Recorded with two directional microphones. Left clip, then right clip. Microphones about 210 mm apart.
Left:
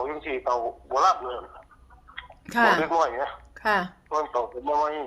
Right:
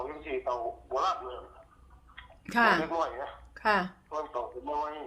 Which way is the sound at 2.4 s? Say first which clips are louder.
Left 4 dB; 10° left (ahead or behind).